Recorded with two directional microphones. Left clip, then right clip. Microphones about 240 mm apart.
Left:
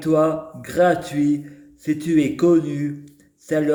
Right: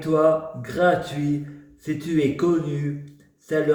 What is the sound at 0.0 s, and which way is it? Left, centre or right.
A man's voice, left.